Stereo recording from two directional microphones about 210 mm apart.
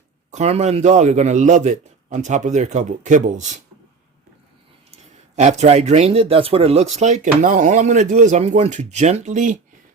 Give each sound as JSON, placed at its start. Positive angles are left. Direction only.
{"t": 0.3, "sound": "speech", "side_deg": -35}
{"t": 5.4, "sound": "speech", "side_deg": -30}